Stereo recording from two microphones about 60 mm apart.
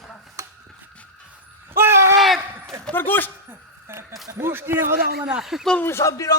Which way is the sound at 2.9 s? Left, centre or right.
Left.